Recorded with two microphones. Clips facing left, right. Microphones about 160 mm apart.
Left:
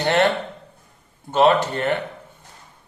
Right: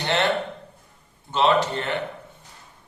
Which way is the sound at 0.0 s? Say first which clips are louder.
Left 5 dB; 50° left (ahead or behind).